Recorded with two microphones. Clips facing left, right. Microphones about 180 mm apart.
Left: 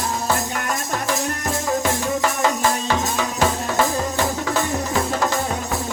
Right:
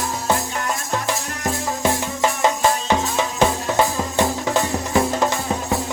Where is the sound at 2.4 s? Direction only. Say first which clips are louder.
Right 1 dB; 20° right (ahead or behind).